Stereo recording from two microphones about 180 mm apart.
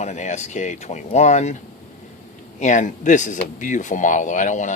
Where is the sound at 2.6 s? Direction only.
45° left (ahead or behind).